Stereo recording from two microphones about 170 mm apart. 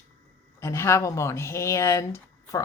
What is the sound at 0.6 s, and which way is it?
Speech, 15° left (ahead or behind).